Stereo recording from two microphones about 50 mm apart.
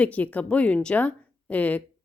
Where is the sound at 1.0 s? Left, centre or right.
Left.